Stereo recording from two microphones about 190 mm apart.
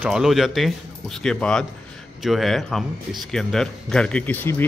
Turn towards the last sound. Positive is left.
turn(degrees=10)  # may be behind; listen again after turning